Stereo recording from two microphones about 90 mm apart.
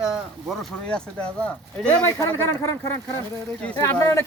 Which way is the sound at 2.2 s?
30° left (ahead or behind).